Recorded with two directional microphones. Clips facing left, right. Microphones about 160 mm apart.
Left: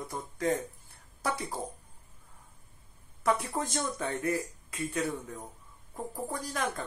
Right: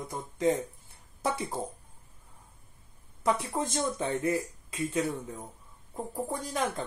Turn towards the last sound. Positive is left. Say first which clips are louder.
# right 2 dB
turn(degrees=-25)  # may be behind; listen again after turning